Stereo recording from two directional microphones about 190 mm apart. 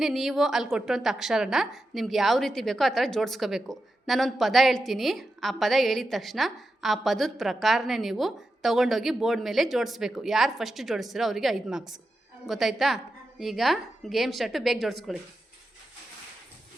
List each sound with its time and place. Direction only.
0.0 s a woman's voice: centre (ahead or behind)